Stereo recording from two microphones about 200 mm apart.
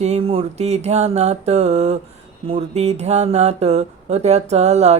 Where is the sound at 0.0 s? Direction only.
30° right (ahead or behind).